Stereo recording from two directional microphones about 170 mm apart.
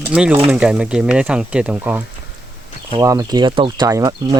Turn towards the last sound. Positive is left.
turn(degrees=-20)  # may be behind; listen again after turning